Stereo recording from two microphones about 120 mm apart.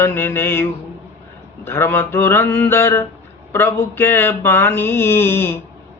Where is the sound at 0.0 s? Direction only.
20° left (ahead or behind).